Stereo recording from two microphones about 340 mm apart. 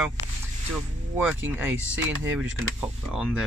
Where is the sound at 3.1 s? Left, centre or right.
Centre.